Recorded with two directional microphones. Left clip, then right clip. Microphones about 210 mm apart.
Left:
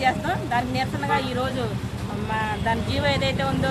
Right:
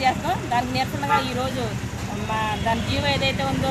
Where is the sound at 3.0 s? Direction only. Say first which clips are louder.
Right 1 dB; 10° right (ahead or behind).